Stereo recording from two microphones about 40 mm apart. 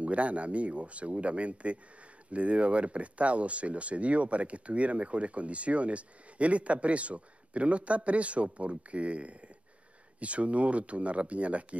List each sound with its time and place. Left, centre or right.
0.0 s speech: right